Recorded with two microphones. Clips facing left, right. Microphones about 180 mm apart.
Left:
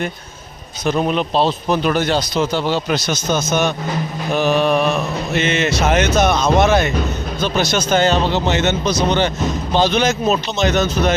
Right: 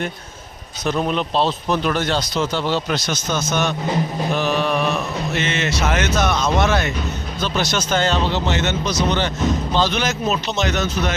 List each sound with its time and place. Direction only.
0.9 s speech: 10° left (ahead or behind)
5.3 s speech: 20° left (ahead or behind)
7.4 s speech: 50° left (ahead or behind)
7.9 s speech: 15° left (ahead or behind)